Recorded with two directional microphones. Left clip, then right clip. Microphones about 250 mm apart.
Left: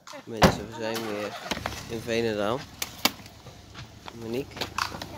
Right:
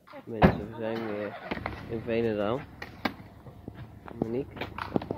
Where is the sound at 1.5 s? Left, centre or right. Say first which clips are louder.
Left 3 dB; left.